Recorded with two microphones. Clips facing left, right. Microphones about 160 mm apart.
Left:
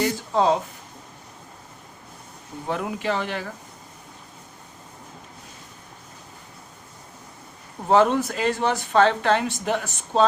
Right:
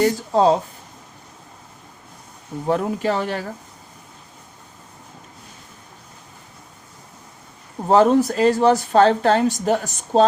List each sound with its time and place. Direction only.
0.0 s a woman's voice: 35° right (ahead or behind)
2.6 s a woman's voice: 40° right (ahead or behind)
7.9 s a woman's voice: 40° right (ahead or behind)